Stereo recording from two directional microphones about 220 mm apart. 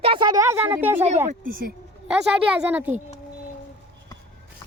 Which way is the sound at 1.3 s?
40° right (ahead or behind).